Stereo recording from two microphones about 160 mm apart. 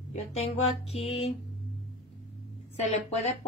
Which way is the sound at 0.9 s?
35° left (ahead or behind).